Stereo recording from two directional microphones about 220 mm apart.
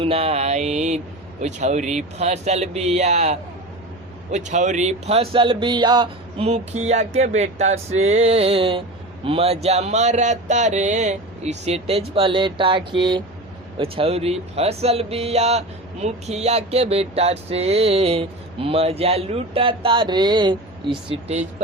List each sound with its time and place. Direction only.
0.0 s speech: 25° right (ahead or behind)